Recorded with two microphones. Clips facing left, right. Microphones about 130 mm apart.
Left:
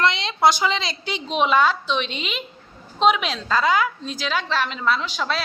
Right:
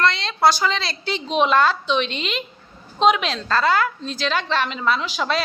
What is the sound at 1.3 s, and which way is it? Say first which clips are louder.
A woman's voice: right 1 dB; 5° left (ahead or behind).